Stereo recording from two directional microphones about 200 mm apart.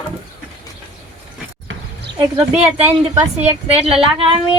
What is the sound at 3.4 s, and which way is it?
Speech, 30° right (ahead or behind).